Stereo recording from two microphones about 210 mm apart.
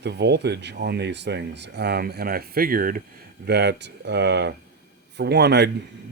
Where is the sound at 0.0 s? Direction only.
55° right (ahead or behind).